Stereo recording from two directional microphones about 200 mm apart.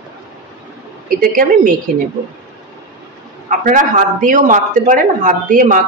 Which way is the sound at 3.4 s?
40° right (ahead or behind).